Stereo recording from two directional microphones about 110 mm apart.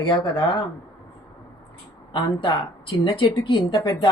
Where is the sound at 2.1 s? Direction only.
45° left (ahead or behind).